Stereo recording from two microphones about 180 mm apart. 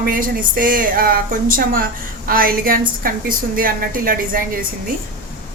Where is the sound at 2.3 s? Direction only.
55° right (ahead or behind).